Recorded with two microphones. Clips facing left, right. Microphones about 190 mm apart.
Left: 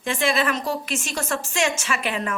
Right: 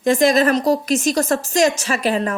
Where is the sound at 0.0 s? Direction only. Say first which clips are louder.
Right 8 dB; 40° right (ahead or behind).